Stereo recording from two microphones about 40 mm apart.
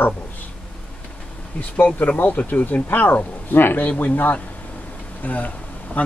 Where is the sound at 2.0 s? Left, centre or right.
Left.